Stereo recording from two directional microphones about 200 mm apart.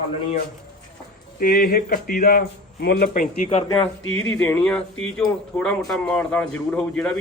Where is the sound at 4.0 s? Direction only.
90° left.